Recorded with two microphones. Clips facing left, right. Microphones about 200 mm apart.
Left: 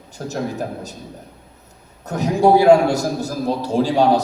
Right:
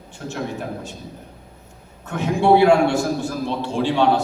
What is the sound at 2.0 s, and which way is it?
A man's voice, 40° left (ahead or behind).